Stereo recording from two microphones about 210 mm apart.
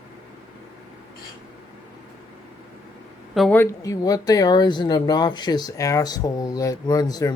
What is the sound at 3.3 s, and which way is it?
Speech, 5° left (ahead or behind).